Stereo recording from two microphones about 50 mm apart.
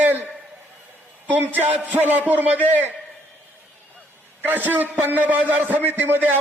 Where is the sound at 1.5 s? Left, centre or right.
Right.